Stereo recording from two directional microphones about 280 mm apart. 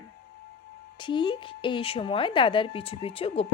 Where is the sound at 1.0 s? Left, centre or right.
Centre.